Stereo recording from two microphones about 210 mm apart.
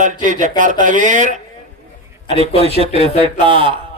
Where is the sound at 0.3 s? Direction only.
35° right (ahead or behind).